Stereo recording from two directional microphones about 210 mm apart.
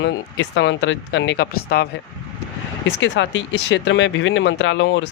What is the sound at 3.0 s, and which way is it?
Speech, 60° left (ahead or behind).